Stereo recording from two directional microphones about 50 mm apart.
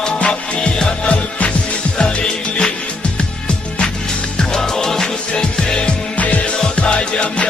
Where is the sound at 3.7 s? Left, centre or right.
Centre.